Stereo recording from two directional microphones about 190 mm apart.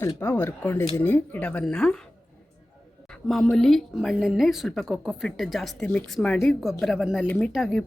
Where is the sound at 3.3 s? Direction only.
Centre (ahead or behind).